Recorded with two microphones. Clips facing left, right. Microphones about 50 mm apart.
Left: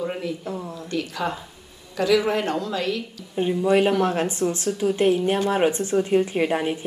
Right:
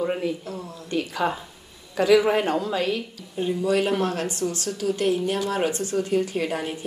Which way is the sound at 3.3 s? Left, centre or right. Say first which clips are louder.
Left 3 dB; left.